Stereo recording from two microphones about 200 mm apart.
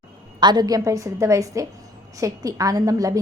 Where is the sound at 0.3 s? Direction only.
20° right (ahead or behind).